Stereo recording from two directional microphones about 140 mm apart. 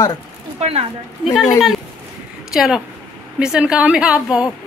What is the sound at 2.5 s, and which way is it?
A woman's voice, 5° right (ahead or behind).